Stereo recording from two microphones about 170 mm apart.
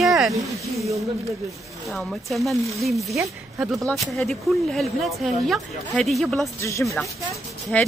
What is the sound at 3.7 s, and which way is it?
Speech, centre (ahead or behind).